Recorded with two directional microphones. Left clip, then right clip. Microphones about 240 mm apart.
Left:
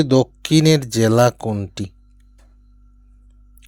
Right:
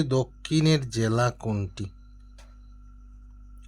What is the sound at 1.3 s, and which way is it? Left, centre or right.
Speech, left.